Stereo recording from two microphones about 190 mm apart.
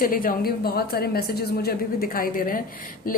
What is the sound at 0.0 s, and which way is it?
A woman's voice, 50° left (ahead or behind).